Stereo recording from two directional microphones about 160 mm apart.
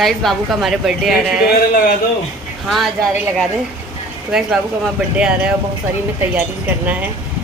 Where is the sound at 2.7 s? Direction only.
Centre (ahead or behind).